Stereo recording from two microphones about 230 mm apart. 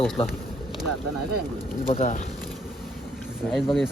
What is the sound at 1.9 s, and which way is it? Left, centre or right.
Speech, left.